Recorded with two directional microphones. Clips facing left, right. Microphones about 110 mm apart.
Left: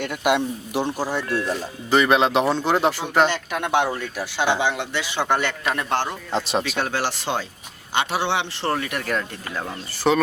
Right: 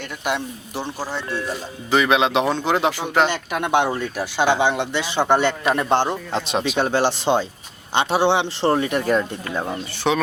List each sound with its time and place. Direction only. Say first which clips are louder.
0.0 s speech: left 4 dB; 15° left (ahead or behind)
1.5 s speech: left 1 dB; centre (ahead or behind)
3.2 s speech: right 1 dB; 15° right (ahead or behind)
6.3 s speech: right 1 dB; centre (ahead or behind)
6.7 s speech: right 5 dB; 20° right (ahead or behind)
10.0 s speech: left 1 dB; centre (ahead or behind)